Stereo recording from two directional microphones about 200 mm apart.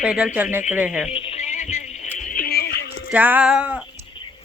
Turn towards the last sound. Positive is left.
turn(degrees=-5)  # may be behind; listen again after turning